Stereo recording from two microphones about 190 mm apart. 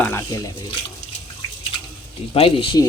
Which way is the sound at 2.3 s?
30° left (ahead or behind).